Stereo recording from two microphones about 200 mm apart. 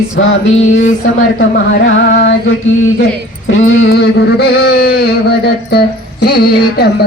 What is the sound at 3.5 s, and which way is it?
Music, 75° left (ahead or behind).